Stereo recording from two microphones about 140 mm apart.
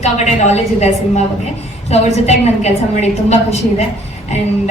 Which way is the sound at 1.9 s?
50° left (ahead or behind).